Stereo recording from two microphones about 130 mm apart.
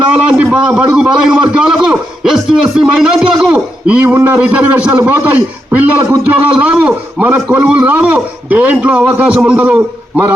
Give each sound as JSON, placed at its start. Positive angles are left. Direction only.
{"t": 0.2, "sound": "a man's voice", "side_deg": -10}